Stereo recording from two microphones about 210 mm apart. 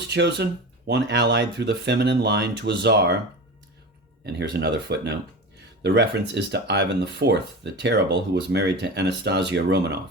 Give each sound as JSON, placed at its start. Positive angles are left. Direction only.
{"t": 0.1, "sound": "speech", "side_deg": -55}
{"t": 4.3, "sound": "speech", "side_deg": -50}